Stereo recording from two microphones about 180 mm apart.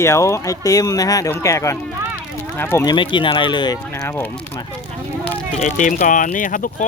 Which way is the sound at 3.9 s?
10° left (ahead or behind).